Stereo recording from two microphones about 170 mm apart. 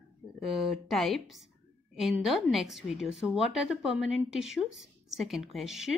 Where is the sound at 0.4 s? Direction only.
Centre (ahead or behind).